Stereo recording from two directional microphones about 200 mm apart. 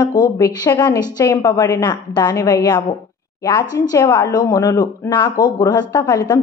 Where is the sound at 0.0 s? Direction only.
20° left (ahead or behind).